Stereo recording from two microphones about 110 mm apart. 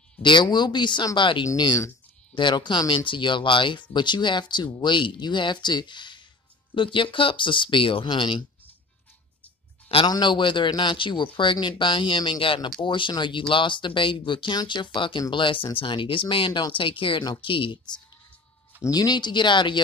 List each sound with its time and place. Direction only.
0.2 s speech: 45° left (ahead or behind)
10.0 s speech: 40° left (ahead or behind)
18.8 s speech: 35° left (ahead or behind)